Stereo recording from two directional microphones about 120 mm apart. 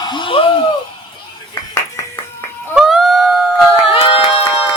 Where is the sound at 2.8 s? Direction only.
5° right (ahead or behind).